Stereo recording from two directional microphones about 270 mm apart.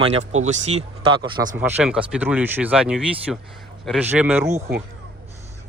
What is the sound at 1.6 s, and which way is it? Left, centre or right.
Speech, centre.